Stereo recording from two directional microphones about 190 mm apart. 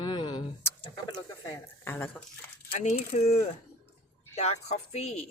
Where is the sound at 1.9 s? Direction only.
10° left (ahead or behind).